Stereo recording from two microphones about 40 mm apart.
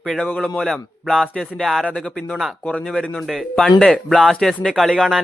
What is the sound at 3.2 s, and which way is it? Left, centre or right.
Speech, centre.